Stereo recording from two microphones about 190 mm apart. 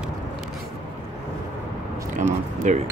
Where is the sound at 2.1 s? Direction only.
40° right (ahead or behind).